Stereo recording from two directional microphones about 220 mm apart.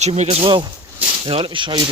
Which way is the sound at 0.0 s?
30° right (ahead or behind).